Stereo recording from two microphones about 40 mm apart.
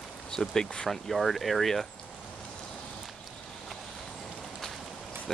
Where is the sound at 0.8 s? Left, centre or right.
Centre.